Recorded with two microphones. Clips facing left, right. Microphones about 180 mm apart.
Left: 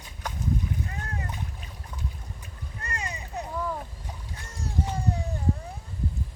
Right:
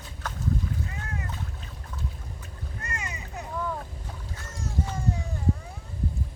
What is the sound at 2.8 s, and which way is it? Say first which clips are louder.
Boat: left 2 dB; 35° left (ahead or behind).